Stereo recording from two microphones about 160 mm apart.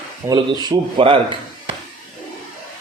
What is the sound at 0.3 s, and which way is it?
Speech, 25° right (ahead or behind).